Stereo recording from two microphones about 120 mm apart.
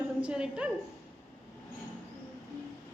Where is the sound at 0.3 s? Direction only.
10° right (ahead or behind).